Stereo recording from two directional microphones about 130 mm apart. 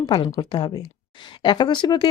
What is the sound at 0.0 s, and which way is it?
A woman's voice, 35° left (ahead or behind).